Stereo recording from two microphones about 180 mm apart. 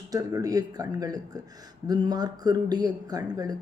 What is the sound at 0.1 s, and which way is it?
Speech, 20° right (ahead or behind).